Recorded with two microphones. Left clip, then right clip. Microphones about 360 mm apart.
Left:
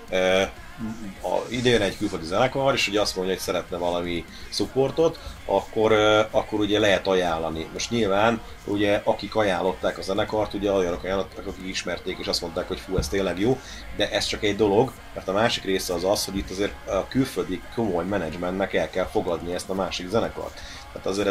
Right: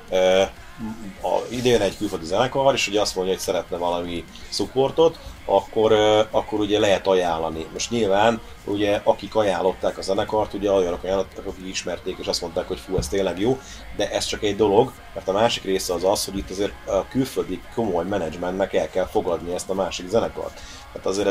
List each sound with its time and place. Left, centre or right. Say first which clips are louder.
0.1 s speech: right 4 dB; right